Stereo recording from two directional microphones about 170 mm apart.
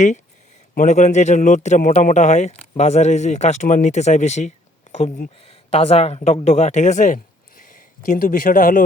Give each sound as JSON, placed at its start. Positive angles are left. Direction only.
{"t": 0.7, "sound": "a man's voice", "side_deg": 45}